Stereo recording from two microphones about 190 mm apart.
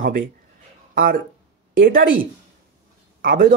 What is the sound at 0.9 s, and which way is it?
A man's voice, 50° right (ahead or behind).